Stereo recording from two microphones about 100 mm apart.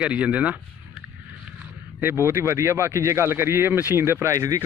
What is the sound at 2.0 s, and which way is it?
Speech, 25° right (ahead or behind).